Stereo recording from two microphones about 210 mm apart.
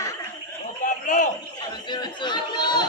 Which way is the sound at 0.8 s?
35° left (ahead or behind).